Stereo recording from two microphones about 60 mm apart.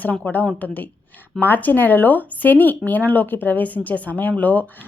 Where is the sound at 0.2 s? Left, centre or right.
Left.